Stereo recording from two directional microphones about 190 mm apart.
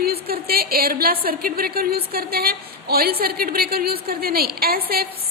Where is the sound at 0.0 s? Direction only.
55° right (ahead or behind).